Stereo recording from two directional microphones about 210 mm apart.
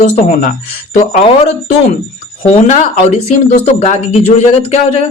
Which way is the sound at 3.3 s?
35° left (ahead or behind).